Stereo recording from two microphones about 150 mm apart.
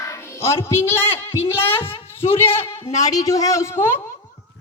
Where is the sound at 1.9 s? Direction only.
15° left (ahead or behind).